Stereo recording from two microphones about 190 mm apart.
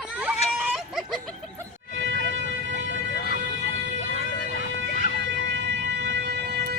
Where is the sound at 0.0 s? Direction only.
5° right (ahead or behind).